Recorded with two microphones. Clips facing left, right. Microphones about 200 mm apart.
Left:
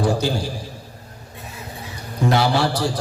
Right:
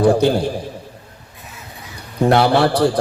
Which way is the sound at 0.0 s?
60° right (ahead or behind).